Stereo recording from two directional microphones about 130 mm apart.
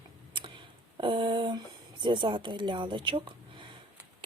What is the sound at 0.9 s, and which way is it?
Speech, 40° right (ahead or behind).